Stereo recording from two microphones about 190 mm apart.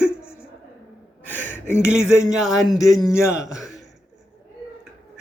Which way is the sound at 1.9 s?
5° right (ahead or behind).